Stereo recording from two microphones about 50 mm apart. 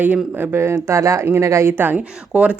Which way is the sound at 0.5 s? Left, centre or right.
Right.